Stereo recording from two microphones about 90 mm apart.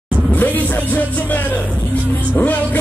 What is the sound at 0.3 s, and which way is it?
Music, 20° left (ahead or behind).